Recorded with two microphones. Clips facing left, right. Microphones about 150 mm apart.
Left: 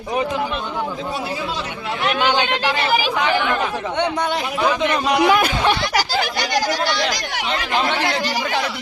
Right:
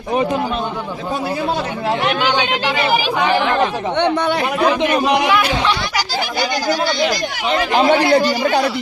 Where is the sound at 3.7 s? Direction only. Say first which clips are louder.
Right 3 dB; 20° right (ahead or behind).